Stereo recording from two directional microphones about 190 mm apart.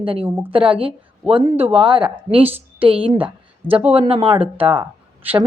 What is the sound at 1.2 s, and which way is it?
Speech, 25° right (ahead or behind).